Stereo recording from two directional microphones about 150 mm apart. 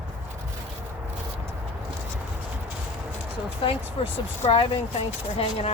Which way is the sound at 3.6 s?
35° left (ahead or behind).